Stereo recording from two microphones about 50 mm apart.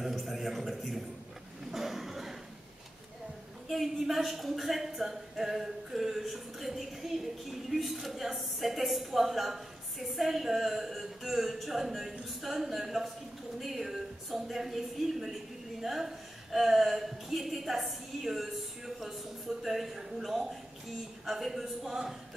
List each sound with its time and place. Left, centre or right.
0.0 s a man's voice: centre
1.7 s a sound: centre
3.6 s a woman's voice: centre